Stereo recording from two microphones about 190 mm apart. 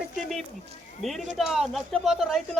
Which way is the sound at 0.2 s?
Centre (ahead or behind).